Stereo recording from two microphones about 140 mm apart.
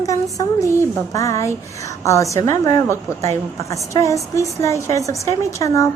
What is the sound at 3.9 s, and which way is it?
A woman's voice, 20° left (ahead or behind).